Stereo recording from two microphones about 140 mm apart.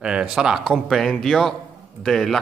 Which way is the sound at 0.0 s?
5° right (ahead or behind).